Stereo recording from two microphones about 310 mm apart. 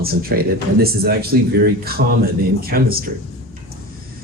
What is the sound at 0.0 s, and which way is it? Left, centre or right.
Speech, right.